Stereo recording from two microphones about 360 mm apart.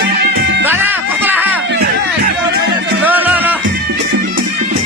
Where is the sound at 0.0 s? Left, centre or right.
Right.